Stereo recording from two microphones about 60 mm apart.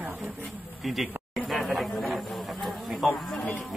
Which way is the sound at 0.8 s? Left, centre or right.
Centre.